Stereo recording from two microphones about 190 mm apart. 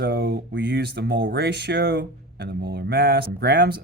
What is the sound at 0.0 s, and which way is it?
Speech, 60° right (ahead or behind).